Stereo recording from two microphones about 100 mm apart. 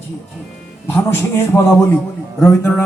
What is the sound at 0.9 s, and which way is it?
Speech, 25° left (ahead or behind).